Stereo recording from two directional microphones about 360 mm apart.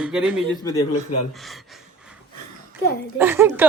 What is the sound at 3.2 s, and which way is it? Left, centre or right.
Speech, centre.